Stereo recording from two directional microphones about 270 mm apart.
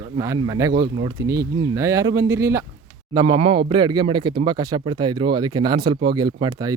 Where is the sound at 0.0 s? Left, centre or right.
Centre.